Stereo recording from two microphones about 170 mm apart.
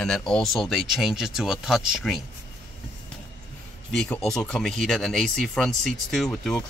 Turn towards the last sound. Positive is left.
turn(degrees=5)  # may be behind; listen again after turning